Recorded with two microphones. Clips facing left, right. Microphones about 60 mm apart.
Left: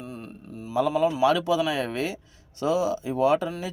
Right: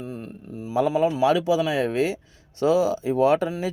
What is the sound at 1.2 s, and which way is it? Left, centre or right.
Speech, centre.